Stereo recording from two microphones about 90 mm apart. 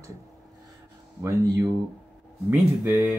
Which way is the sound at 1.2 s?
30° right (ahead or behind).